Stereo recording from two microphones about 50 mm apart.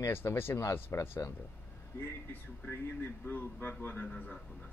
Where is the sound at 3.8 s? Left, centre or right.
Left.